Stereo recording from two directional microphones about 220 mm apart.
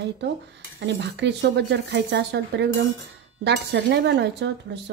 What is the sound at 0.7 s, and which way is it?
A woman's voice, 50° right (ahead or behind).